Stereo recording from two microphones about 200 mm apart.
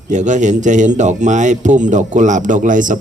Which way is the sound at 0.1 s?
35° right (ahead or behind).